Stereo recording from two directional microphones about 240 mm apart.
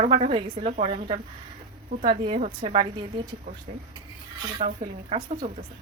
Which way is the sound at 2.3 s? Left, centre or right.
Right.